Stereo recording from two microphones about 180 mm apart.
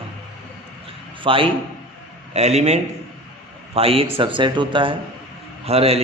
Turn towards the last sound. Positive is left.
turn(degrees=-35)  # may be behind; listen again after turning